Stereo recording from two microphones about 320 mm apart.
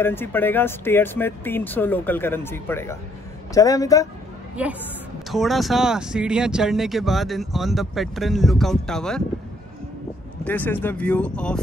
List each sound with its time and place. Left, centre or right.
0.0 s speech: centre
4.6 s speech: centre
10.4 s speech: centre